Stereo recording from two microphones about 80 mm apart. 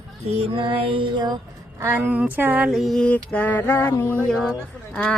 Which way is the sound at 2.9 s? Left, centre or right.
Centre.